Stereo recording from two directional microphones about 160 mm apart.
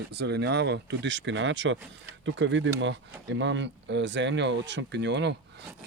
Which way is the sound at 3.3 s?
90° right.